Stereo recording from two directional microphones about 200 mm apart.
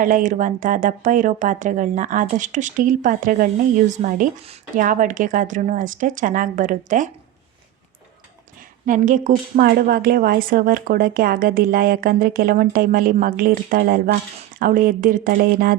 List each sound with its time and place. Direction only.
0.0 s speech: 40° right (ahead or behind)
8.9 s speech: 40° right (ahead or behind)